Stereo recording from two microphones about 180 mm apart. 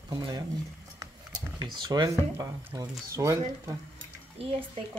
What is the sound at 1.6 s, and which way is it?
Speech, 20° right (ahead or behind).